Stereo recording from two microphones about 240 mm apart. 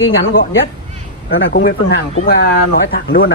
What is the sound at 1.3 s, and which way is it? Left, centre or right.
Speech, left.